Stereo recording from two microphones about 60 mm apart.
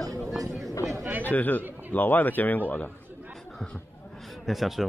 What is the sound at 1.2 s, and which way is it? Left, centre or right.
Speech, left.